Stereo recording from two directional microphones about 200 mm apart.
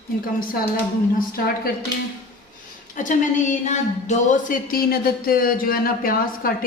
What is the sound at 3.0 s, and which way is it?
Speech, 40° left (ahead or behind).